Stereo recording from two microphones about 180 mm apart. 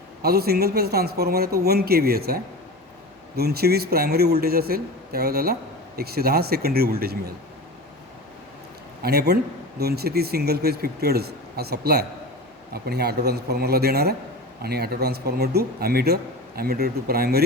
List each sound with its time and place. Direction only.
0.2 s a man's voice: 60° right (ahead or behind)
9.0 s a man's voice: 60° right (ahead or behind)